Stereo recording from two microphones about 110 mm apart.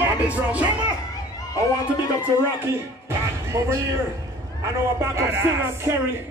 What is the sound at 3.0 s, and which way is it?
A man's voice, 25° right (ahead or behind).